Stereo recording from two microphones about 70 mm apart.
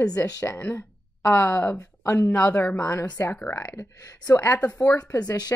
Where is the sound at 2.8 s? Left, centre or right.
Left.